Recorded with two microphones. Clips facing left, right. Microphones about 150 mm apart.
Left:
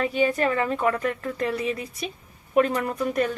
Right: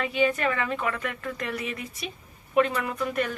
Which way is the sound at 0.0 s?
40° left (ahead or behind).